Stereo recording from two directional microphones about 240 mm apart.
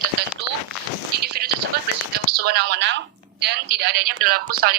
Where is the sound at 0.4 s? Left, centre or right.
Right.